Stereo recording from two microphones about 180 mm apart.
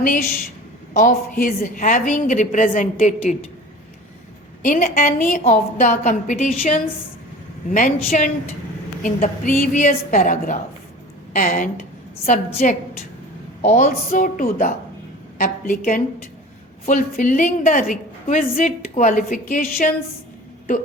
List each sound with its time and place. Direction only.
0.0 s a woman's voice: 50° left (ahead or behind)
4.6 s a woman's voice: 45° left (ahead or behind)